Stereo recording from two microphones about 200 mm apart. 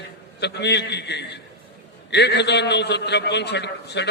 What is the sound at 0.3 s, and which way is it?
A man's voice, 55° left (ahead or behind).